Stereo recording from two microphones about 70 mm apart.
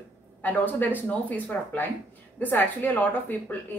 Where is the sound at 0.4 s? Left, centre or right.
Left.